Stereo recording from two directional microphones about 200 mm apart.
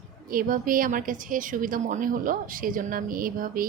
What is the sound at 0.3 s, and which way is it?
A woman's voice, 45° right (ahead or behind).